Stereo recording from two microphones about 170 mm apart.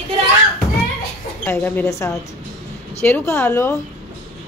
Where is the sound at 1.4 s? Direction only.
15° left (ahead or behind).